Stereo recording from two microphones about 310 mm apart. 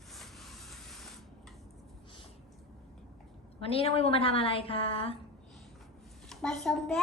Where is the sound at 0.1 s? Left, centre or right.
Centre.